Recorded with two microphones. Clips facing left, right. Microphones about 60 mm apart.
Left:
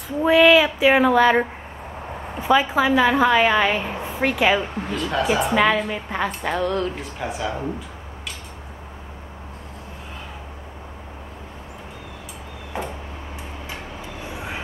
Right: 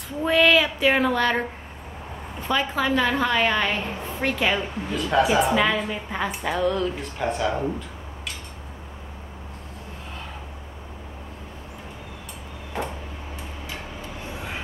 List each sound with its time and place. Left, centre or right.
0.2 s female singing: centre
2.4 s a woman's voice: centre
6.0 s female singing: centre
12.7 s a sound: centre
14.3 s vehicle: centre